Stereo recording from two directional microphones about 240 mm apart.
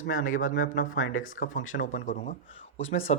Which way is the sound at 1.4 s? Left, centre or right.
Left.